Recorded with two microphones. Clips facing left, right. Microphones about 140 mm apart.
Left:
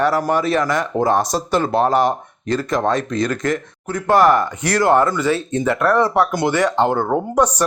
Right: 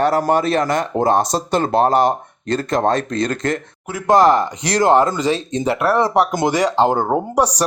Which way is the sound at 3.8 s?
15° right (ahead or behind).